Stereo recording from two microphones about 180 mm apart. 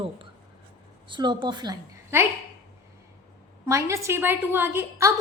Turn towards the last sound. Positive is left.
turn(degrees=-15)  # may be behind; listen again after turning